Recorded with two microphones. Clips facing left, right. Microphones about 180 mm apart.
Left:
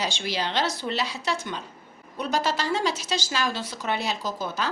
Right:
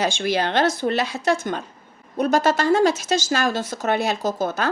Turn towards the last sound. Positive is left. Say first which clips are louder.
# right 7 dB
turn(degrees=-50)  # may be behind; listen again after turning